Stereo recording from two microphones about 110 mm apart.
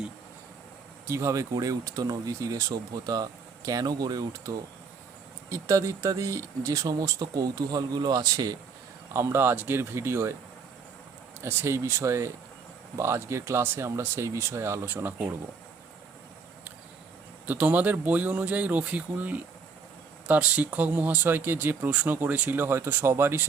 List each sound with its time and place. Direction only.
1.0 s speech: 25° right (ahead or behind)
9.1 s speech: 25° right (ahead or behind)
11.4 s speech: 25° right (ahead or behind)
17.4 s speech: 15° right (ahead or behind)